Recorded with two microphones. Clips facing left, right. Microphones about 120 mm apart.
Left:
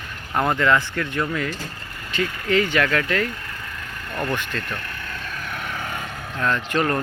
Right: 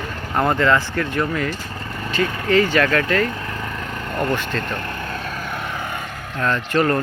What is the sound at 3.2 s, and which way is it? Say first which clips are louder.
Vehicle: right 5 dB; 55° right (ahead or behind).